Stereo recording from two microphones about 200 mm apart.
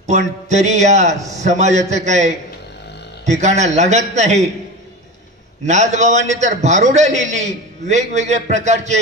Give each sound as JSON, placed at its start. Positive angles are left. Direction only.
{"t": 0.0, "sound": "a man's voice", "side_deg": -35}
{"t": 5.7, "sound": "a man's voice", "side_deg": -35}